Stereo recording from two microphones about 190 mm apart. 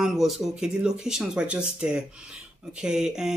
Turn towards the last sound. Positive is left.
turn(degrees=-5)  # may be behind; listen again after turning